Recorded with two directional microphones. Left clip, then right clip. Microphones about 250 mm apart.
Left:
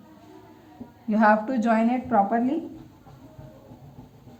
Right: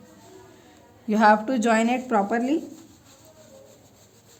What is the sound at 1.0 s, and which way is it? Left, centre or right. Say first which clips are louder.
A woman's voice: right 2 dB; right.